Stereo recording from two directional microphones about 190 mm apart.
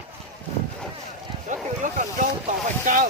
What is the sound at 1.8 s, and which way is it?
Speech, 40° right (ahead or behind).